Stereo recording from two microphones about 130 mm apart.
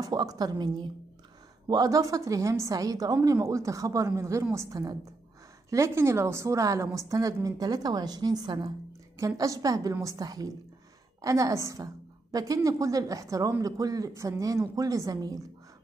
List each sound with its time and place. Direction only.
0.0 s a woman's voice: 30° right (ahead or behind)